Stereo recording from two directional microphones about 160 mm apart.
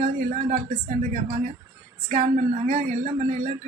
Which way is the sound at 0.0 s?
50° right (ahead or behind).